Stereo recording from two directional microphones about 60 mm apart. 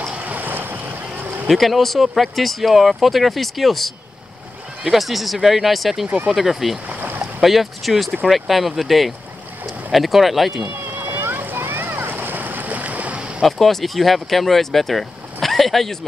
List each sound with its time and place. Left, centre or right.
0.0 s boat: right
1.5 s speech: centre
6.9 s boat: right
7.4 s speech: centre
10.6 s a sound: right
13.4 s speech: centre